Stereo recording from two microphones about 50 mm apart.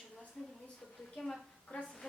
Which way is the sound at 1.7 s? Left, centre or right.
Left.